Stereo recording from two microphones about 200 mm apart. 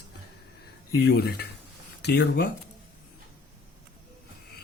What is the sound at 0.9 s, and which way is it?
Speech, 55° left (ahead or behind).